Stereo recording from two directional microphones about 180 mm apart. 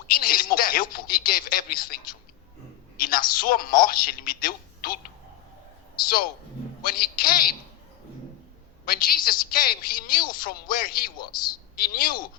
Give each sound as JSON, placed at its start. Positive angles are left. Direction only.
{"t": 0.1, "sound": "a man's voice", "side_deg": 55}
{"t": 6.8, "sound": "a man's voice", "side_deg": 55}
{"t": 8.8, "sound": "a woman's voice", "side_deg": 55}